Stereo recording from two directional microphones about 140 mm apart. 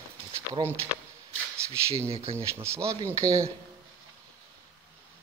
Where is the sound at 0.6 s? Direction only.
35° right (ahead or behind).